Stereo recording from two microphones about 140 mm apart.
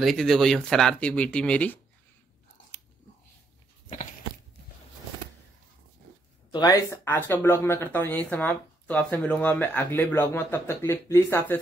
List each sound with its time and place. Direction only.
0.0 s speech: centre (ahead or behind)
6.5 s speech: 25° left (ahead or behind)
7.1 s speech: 15° left (ahead or behind)